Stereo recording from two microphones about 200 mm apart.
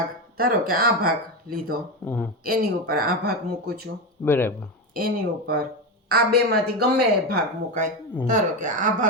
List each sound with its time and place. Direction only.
0.3 s speech: 45° right (ahead or behind)
2.0 s speech: 5° left (ahead or behind)
2.4 s speech: 50° right (ahead or behind)
4.2 s speech: 10° left (ahead or behind)
4.9 s a woman's voice: 50° right (ahead or behind)